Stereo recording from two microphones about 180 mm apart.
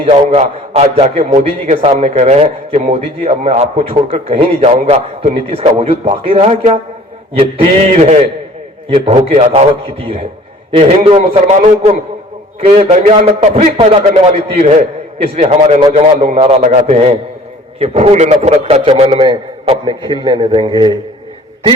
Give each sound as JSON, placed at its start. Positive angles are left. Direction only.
{"t": 0.0, "sound": "a man's voice", "side_deg": -35}